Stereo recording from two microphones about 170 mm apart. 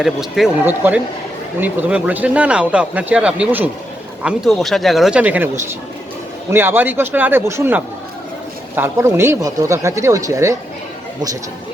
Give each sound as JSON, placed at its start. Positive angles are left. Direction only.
{"t": 0.0, "sound": "speech", "side_deg": 0}